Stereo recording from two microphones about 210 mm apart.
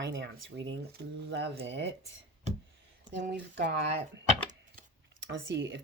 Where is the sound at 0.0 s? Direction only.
60° right (ahead or behind).